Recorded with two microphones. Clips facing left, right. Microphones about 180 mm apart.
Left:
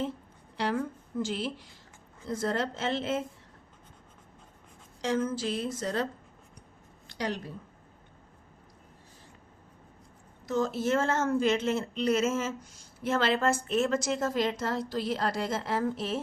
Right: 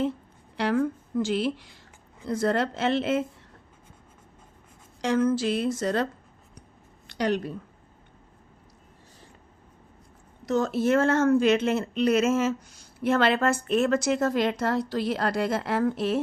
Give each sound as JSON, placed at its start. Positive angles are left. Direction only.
{"t": 0.5, "sound": "a woman's voice", "side_deg": -65}
{"t": 5.0, "sound": "speech", "side_deg": -70}
{"t": 7.1, "sound": "a woman's voice", "side_deg": -70}
{"t": 10.4, "sound": "speech", "side_deg": -70}